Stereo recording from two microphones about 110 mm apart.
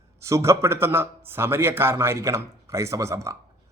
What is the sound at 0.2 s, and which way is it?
Speech, 25° right (ahead or behind).